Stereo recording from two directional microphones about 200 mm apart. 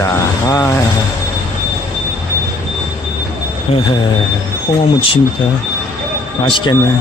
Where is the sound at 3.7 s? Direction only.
30° left (ahead or behind).